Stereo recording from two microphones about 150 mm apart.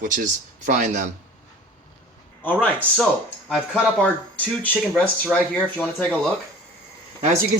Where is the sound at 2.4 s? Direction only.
10° left (ahead or behind).